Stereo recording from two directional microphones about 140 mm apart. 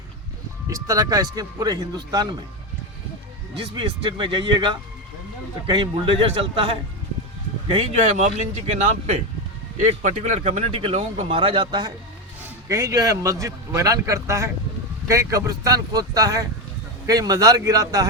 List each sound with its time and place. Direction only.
0.7 s a man's voice: 25° right (ahead or behind)
3.8 s a man's voice: 35° right (ahead or behind)
8.0 s a man's voice: 55° right (ahead or behind); by 18.1 s 25° right (ahead or behind)